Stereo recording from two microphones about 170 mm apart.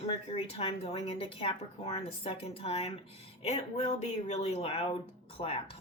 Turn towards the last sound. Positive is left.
turn(degrees=30)  # may be behind; listen again after turning